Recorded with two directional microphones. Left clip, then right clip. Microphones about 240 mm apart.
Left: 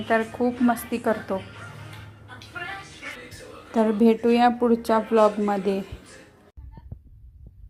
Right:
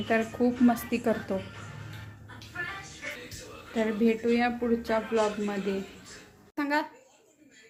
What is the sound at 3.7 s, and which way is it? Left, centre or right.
Speech, left.